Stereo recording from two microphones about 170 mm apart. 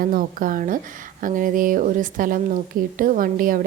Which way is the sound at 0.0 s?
55° right (ahead or behind).